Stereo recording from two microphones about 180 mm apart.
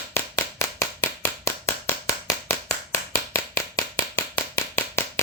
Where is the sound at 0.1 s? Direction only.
15° left (ahead or behind).